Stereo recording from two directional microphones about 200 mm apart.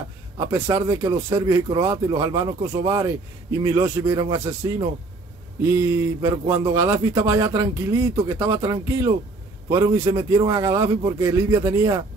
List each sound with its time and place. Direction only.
0.4 s speech: 15° right (ahead or behind)